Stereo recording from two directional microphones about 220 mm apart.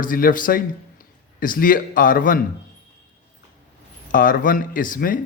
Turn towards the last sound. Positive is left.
turn(degrees=40)  # may be behind; listen again after turning